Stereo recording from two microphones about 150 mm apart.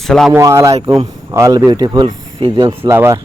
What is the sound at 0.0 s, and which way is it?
Speech, centre (ahead or behind).